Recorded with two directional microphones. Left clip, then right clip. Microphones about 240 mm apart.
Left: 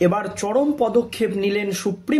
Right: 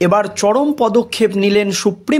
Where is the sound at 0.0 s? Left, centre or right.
Right.